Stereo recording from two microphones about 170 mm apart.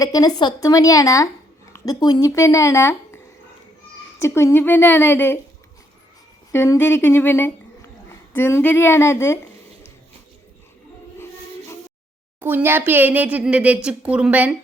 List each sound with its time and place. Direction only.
0.0 s a woman's voice: 20° left (ahead or behind)
4.2 s speech: 15° left (ahead or behind)
6.5 s speech: 15° left (ahead or behind)
12.4 s speech: 10° right (ahead or behind)